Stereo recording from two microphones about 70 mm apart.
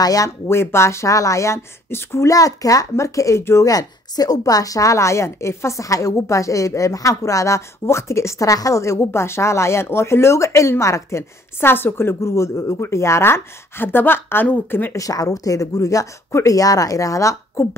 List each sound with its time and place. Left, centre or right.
0.0 s speech: left
0.5 s speech: left
2.2 s speech: left
3.7 s speech: left
15.0 s speech: left